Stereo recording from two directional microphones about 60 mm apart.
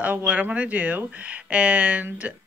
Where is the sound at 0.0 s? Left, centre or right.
Right.